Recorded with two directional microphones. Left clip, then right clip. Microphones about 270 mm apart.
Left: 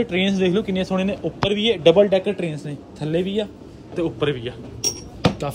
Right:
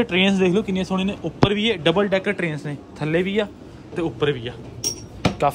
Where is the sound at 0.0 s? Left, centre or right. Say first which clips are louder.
Right 2 dB; centre.